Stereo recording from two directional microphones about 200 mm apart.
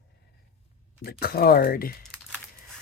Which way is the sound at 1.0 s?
50° left (ahead or behind).